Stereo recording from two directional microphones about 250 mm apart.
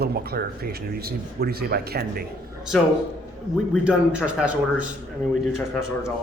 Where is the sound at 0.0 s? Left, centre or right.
Right.